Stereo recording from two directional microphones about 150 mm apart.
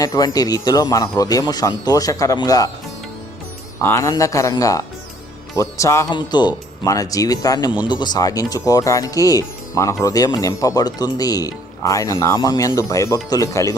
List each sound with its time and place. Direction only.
0.0 s speech: 25° left (ahead or behind)
3.8 s speech: 20° left (ahead or behind)